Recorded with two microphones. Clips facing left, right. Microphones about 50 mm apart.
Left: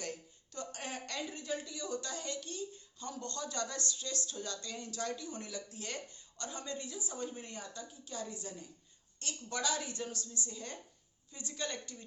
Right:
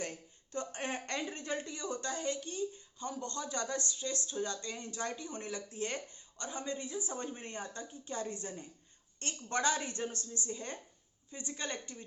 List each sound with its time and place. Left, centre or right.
0.5 s a woman's voice: right